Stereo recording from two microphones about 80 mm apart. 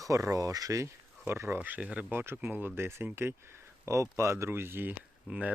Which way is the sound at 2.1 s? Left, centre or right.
Right.